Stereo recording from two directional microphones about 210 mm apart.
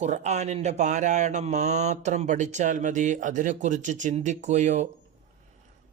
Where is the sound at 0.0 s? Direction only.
35° right (ahead or behind).